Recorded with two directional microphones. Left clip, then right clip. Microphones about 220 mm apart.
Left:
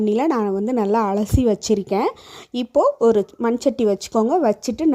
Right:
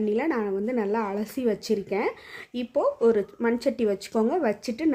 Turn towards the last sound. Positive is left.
turn(degrees=30)  # may be behind; listen again after turning